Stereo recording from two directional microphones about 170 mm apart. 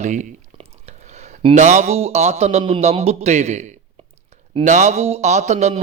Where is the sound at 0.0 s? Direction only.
45° right (ahead or behind).